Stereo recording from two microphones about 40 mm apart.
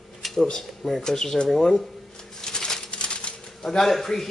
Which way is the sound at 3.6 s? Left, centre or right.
Centre.